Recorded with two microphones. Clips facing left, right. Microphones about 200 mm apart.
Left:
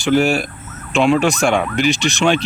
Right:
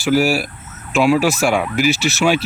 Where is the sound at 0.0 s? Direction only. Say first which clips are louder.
Left 1 dB; 5° right (ahead or behind).